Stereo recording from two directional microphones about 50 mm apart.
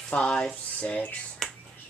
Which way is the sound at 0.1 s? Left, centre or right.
Centre.